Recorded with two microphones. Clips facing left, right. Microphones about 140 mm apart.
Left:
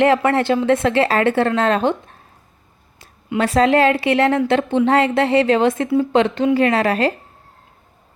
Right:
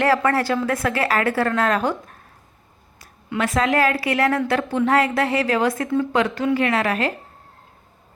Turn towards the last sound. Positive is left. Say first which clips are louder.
# left 4 dB
turn(degrees=30)  # may be behind; listen again after turning